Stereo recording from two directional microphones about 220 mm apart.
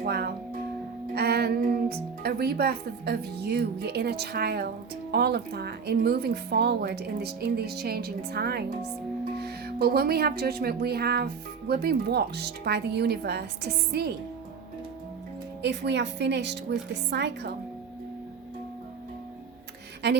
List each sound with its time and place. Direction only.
0.0 s speech: 45° right (ahead or behind)
15.6 s speech: 50° right (ahead or behind)